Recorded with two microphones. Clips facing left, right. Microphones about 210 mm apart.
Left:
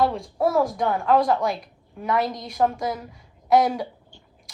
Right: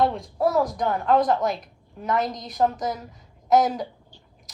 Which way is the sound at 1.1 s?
45° right (ahead or behind).